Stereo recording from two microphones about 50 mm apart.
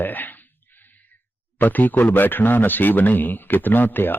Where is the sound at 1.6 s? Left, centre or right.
Left.